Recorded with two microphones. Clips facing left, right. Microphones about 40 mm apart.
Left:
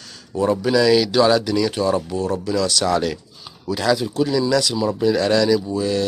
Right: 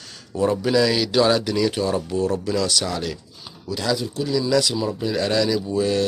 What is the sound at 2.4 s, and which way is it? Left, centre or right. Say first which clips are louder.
Speech: left 2 dB; centre.